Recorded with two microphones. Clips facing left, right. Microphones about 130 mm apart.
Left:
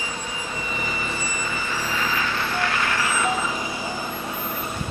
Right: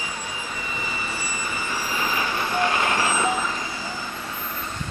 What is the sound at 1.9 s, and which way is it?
Vehicle, 15° right (ahead or behind).